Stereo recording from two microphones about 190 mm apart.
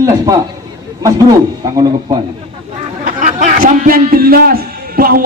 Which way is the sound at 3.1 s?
45° right (ahead or behind).